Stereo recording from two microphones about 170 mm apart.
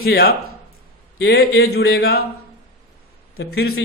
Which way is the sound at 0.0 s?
70° left (ahead or behind).